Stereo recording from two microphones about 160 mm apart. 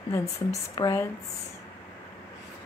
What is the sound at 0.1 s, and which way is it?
Speech, 20° left (ahead or behind).